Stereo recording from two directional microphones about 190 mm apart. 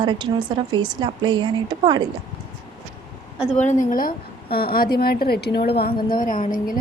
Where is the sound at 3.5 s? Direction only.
40° left (ahead or behind).